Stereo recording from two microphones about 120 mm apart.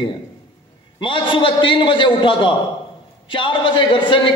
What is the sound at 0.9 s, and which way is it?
A man's voice, 45° left (ahead or behind).